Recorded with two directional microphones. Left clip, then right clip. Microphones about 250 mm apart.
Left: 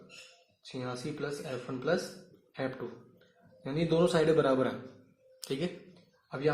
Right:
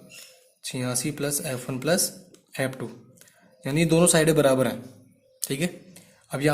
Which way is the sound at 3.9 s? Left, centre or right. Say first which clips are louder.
Right 5 dB; right.